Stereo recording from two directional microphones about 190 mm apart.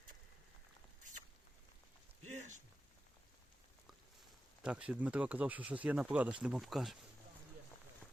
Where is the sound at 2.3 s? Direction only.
40° right (ahead or behind).